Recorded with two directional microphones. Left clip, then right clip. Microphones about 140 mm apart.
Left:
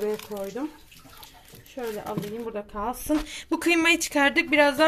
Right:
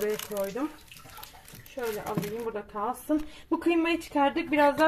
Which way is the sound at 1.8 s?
10° left (ahead or behind).